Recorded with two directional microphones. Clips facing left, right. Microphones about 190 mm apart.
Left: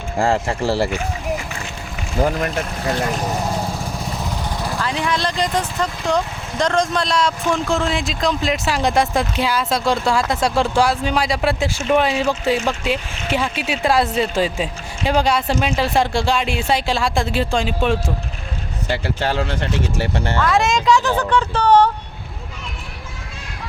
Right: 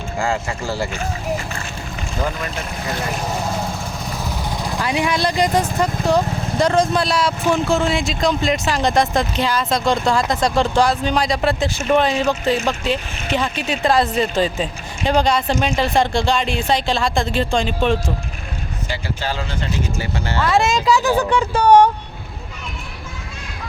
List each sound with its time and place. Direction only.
0.2 s speech: 35° left (ahead or behind)
2.2 s speech: 30° left (ahead or behind)
3.2 s vehicle: 15° left (ahead or behind)
4.4 s vehicle: 15° right (ahead or behind)
6.1 s speech: 5° right (ahead or behind)
18.9 s speech: 65° left (ahead or behind)
20.3 s speech: 5° right (ahead or behind)